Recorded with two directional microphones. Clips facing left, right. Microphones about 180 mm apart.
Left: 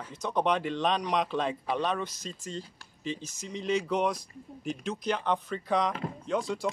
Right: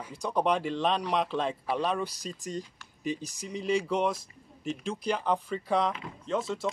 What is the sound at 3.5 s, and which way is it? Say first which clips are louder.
Speech: right 1 dB; 10° right (ahead or behind).